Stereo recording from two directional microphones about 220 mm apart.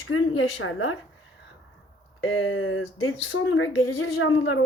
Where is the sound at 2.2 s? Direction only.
65° left (ahead or behind).